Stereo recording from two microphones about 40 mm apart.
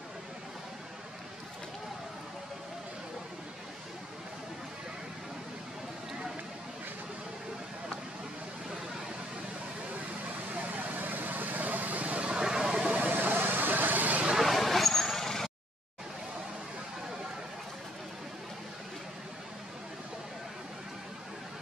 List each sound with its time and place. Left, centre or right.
10.5 s vehicle: right
12.4 s vehicle: centre
13.1 s vehicle: right
14.3 s vehicle: centre